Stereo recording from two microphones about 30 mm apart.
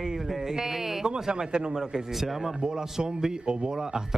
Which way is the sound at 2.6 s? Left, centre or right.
Right.